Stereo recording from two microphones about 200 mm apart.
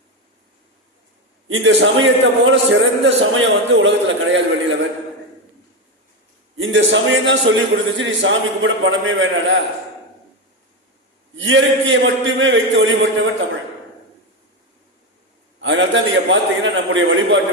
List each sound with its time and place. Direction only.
1.5 s a man's voice: 70° right (ahead or behind)
6.6 s a man's voice: 70° right (ahead or behind)
11.3 s a man's voice: 70° right (ahead or behind)
15.6 s a man's voice: 70° right (ahead or behind)